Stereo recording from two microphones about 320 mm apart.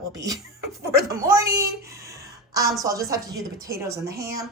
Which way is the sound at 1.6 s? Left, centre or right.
Centre.